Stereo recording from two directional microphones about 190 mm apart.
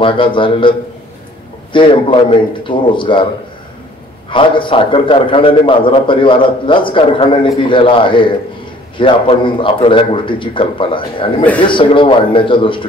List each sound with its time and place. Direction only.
0.0 s a man's voice: 25° left (ahead or behind)
4.3 s a man's voice: 25° left (ahead or behind)